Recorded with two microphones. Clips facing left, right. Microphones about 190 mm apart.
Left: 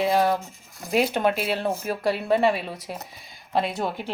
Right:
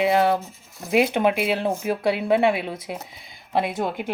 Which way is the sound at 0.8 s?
Centre (ahead or behind).